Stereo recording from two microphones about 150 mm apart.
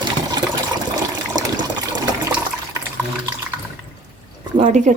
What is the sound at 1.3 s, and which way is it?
Water, 25° right (ahead or behind).